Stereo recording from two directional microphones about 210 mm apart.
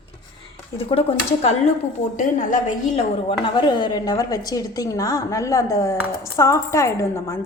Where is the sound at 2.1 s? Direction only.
40° left (ahead or behind).